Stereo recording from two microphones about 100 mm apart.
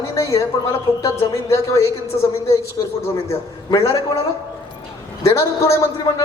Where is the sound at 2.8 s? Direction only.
40° left (ahead or behind).